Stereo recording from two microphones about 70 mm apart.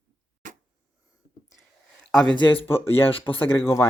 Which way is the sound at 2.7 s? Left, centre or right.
Left.